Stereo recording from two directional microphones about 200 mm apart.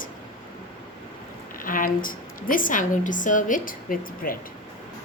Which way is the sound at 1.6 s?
45° left (ahead or behind).